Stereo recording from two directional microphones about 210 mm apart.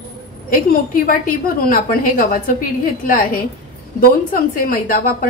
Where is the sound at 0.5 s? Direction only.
40° left (ahead or behind).